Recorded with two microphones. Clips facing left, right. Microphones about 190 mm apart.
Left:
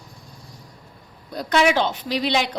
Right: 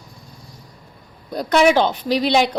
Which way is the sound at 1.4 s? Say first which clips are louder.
Right 4 dB; 40° right (ahead or behind).